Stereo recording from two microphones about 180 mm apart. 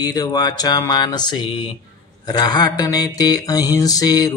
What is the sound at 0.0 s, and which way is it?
Mantra, 20° left (ahead or behind).